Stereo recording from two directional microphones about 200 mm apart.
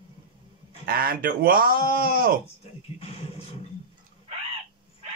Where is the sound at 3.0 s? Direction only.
30° left (ahead or behind).